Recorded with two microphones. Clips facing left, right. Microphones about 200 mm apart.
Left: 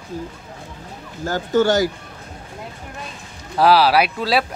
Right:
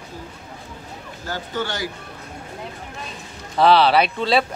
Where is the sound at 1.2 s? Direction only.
45° left (ahead or behind).